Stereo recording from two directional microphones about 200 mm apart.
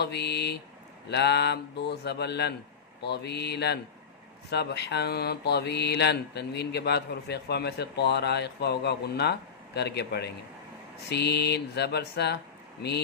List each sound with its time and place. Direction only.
0.0 s speech: 55° left (ahead or behind)